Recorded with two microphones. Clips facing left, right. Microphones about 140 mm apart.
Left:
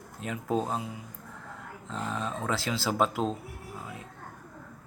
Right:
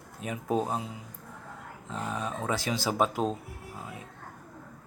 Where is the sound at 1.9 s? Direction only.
10° right (ahead or behind).